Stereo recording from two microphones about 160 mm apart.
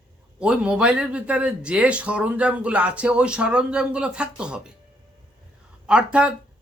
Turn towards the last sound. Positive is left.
turn(degrees=-5)  # may be behind; listen again after turning